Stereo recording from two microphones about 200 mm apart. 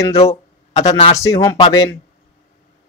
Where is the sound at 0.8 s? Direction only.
35° left (ahead or behind).